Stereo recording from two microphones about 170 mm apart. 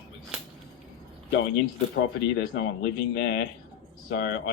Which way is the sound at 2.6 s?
85° left.